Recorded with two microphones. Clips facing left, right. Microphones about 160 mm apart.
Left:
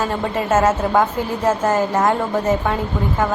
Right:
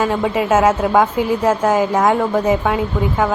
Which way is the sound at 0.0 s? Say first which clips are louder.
Right 4 dB; 10° right (ahead or behind).